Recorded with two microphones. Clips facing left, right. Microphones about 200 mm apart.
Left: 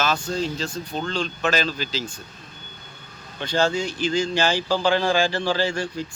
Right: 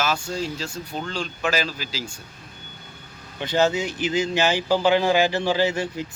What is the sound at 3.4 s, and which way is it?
Speech, 20° right (ahead or behind).